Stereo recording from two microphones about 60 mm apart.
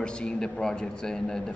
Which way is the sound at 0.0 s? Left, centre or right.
Centre.